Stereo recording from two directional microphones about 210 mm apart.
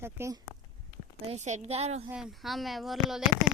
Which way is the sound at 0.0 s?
10° right (ahead or behind).